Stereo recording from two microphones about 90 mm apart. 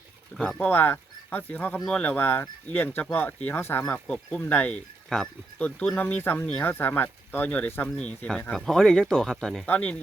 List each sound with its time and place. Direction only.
0.6 s speech: 20° left (ahead or behind)
3.9 s speech: 15° left (ahead or behind)
5.0 s speech: 5° left (ahead or behind)
5.5 s speech: 15° left (ahead or behind)
9.6 s speech: 15° left (ahead or behind)